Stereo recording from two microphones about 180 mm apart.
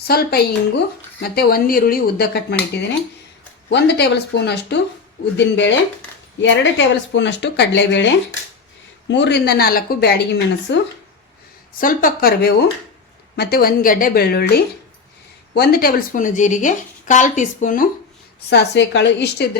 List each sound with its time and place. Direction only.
0.1 s a woman's voice: 60° left (ahead or behind)
3.7 s speech: 70° left (ahead or behind)
6.4 s a woman's voice: 90° left; by 10.8 s 65° left (ahead or behind)
11.8 s a woman's voice: 50° left (ahead or behind)
18.4 s speech: 70° left (ahead or behind)